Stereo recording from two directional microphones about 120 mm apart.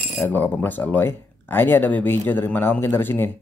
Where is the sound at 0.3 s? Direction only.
15° left (ahead or behind).